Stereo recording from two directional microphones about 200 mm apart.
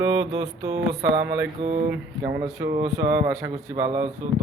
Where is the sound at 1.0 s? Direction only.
60° right (ahead or behind).